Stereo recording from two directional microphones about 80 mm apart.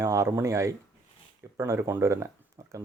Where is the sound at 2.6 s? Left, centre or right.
Right.